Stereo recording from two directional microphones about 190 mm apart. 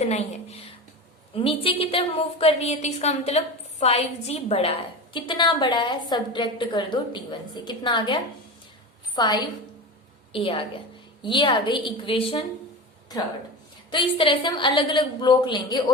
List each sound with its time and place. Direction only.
0.0 s a woman's voice: 35° left (ahead or behind)
13.9 s a woman's voice: 25° left (ahead or behind)